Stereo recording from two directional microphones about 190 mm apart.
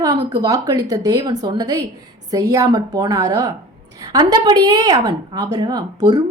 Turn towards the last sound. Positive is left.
turn(degrees=-20)  # may be behind; listen again after turning